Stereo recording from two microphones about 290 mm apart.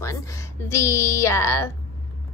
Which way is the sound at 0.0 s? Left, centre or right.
Centre.